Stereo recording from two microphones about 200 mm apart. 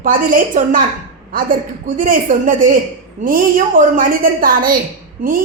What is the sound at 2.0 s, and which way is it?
Speech, 40° right (ahead or behind).